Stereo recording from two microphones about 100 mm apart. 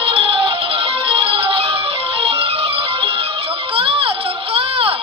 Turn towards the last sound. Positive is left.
turn(degrees=-70)  # may be behind; listen again after turning